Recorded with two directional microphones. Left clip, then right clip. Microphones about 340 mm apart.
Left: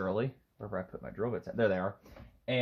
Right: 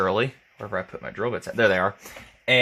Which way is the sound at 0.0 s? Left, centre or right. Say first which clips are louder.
Right 11 dB; right.